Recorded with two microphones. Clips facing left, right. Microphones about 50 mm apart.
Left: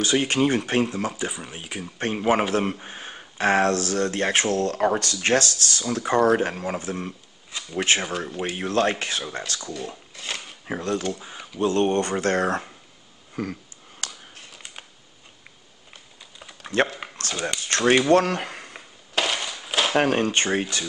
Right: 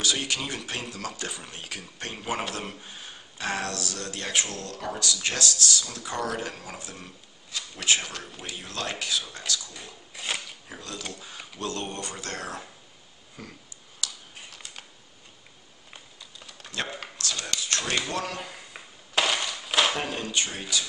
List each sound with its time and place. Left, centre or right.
0.0 s speech: left
1.1 s speech: centre
1.8 s speech: left
10.1 s speech: centre
10.7 s speech: left
14.0 s a sound: left
16.7 s speech: left
17.2 s a sound: left
17.6 s speech: left
19.1 s a sound: centre
20.0 s speech: left